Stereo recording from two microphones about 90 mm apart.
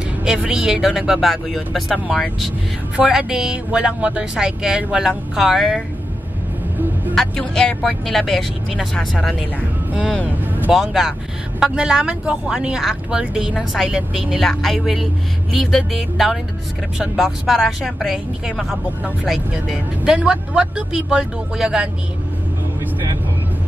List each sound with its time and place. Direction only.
0.2 s speech: 10° right (ahead or behind)
7.2 s a woman's voice: 5° left (ahead or behind)
10.4 s music: 20° right (ahead or behind)
10.7 s a woman's voice: 5° right (ahead or behind)
14.4 s a woman's voice: centre (ahead or behind)